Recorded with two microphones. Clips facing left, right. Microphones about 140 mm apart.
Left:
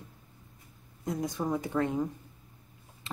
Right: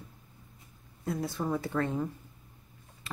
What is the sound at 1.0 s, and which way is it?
Speech, 15° left (ahead or behind).